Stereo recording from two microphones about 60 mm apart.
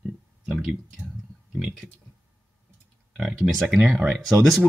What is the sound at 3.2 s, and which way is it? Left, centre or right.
Speech, centre.